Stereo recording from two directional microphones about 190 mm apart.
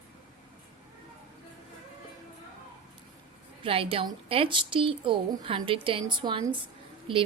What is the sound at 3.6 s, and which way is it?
A woman's voice, 30° right (ahead or behind).